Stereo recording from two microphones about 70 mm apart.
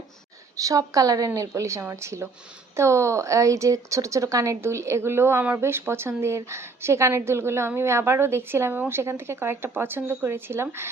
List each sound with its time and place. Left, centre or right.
0.5 s a woman's voice: right